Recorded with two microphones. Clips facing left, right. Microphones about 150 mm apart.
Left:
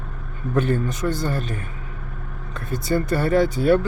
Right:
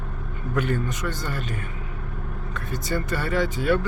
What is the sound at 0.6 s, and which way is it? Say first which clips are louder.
Speech: left 4 dB; 30° left (ahead or behind).